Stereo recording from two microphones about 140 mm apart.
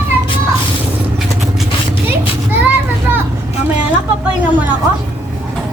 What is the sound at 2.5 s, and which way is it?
Child singing, 15° right (ahead or behind).